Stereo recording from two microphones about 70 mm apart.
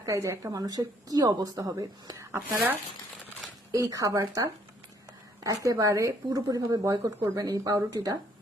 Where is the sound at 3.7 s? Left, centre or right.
Right.